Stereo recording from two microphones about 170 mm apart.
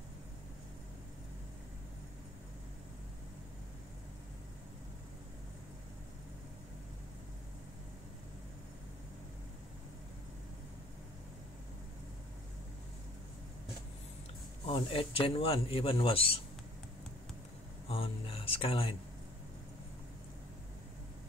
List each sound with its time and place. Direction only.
14.7 s a man's voice: 30° left (ahead or behind)
17.8 s music: 35° left (ahead or behind)